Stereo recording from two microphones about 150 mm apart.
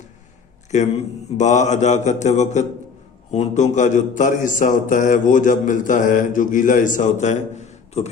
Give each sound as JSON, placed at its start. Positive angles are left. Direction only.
{"t": 0.7, "sound": "a man's voice", "side_deg": 50}